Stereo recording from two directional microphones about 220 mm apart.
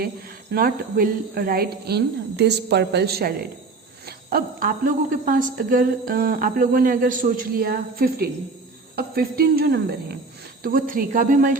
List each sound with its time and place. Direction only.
0.5 s a woman's voice: 40° right (ahead or behind)
4.0 s a sound: 45° right (ahead or behind)
5.2 s a woman's voice: 35° right (ahead or behind)